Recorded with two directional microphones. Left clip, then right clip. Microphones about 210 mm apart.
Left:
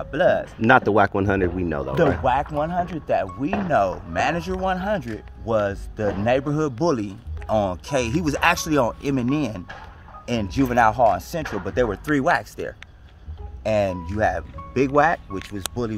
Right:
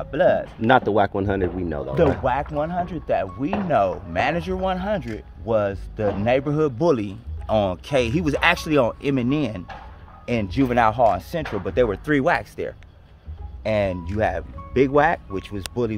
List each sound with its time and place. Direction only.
0.1 s speech: 5° right (ahead or behind)
0.6 s speech: 10° left (ahead or behind)
2.0 s speech: 5° right (ahead or behind); by 15.9 s 20° right (ahead or behind)